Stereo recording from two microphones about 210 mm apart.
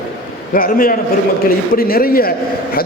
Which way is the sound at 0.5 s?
40° left (ahead or behind).